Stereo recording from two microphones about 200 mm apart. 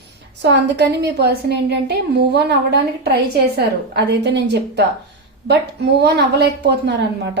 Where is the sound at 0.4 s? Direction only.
60° right (ahead or behind).